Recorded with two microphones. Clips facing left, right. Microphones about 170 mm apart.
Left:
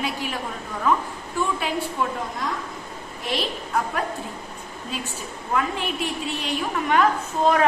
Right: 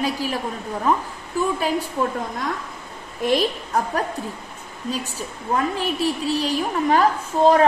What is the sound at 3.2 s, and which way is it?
Speech, 40° right (ahead or behind).